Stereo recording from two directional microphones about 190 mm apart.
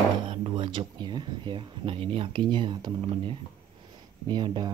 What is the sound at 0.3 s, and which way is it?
Speech, 25° right (ahead or behind).